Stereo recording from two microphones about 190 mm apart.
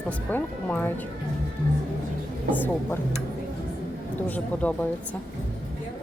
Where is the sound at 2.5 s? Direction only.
10° left (ahead or behind).